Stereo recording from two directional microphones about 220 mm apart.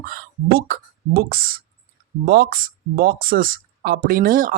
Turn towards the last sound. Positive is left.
turn(degrees=-40)  # may be behind; listen again after turning